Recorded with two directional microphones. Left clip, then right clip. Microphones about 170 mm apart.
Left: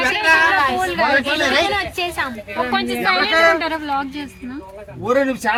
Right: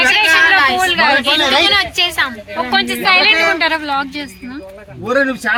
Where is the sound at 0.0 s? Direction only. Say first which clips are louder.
Right 4 dB; 10° left (ahead or behind).